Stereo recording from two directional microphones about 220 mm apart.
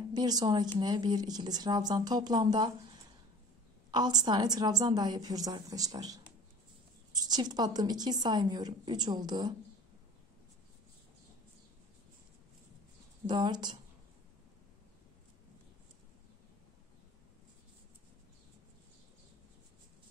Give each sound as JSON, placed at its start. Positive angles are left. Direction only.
{"t": 0.1, "sound": "a woman's voice", "side_deg": -20}
{"t": 13.3, "sound": "a woman's voice", "side_deg": -20}